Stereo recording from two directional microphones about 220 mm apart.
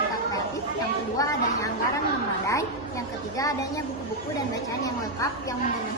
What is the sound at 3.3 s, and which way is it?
Speech, 15° left (ahead or behind).